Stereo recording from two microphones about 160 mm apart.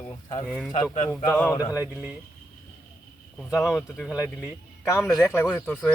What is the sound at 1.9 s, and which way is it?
Speech, 5° right (ahead or behind).